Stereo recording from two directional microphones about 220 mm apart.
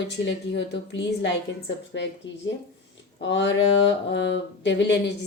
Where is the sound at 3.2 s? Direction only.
55° left (ahead or behind).